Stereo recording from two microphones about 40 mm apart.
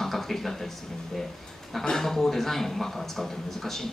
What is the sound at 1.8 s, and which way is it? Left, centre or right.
Speech, centre.